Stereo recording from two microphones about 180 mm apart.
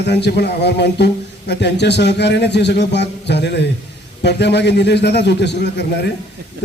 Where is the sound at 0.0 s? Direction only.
70° left (ahead or behind).